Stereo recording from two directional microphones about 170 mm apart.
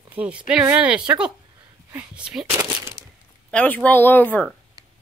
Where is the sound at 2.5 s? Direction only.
15° right (ahead or behind).